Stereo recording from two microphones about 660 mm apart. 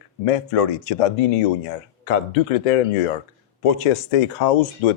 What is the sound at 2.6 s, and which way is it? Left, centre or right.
Speech, left.